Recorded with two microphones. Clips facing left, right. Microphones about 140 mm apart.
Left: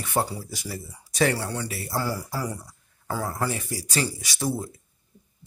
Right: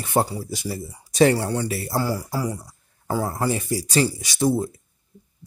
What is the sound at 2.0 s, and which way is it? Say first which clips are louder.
Speech: right 3 dB; 15° right (ahead or behind).